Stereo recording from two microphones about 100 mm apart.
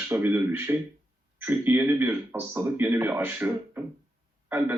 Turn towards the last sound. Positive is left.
turn(degrees=-25)  # may be behind; listen again after turning